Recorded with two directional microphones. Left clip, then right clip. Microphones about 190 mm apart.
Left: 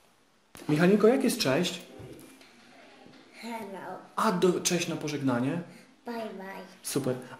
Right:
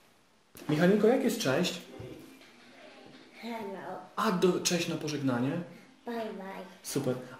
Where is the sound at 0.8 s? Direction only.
40° left (ahead or behind).